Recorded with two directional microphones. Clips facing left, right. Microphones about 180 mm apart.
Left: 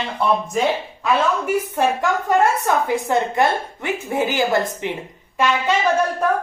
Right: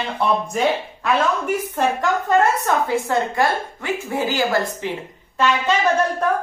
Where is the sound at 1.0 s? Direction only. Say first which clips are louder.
Left 1 dB; 5° left (ahead or behind).